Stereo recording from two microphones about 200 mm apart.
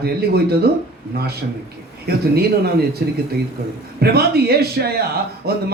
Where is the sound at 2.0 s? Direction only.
50° right (ahead or behind).